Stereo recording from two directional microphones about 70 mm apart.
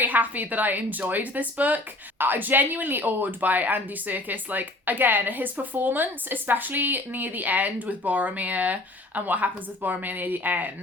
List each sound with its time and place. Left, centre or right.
0.0 s a woman's voice: right